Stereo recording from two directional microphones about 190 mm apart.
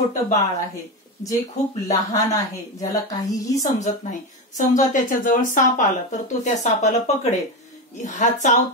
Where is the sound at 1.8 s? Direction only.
20° left (ahead or behind).